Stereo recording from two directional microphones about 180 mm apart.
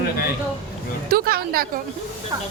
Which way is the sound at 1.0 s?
55° right (ahead or behind).